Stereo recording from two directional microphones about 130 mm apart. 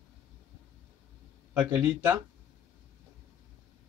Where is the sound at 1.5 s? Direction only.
15° right (ahead or behind).